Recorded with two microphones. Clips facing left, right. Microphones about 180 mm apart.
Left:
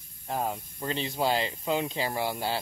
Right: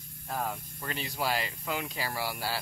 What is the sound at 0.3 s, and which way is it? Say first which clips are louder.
Speech: left 3 dB; 20° left (ahead or behind).